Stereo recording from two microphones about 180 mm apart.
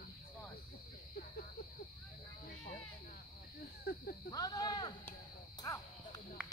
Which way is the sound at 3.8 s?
60° left (ahead or behind).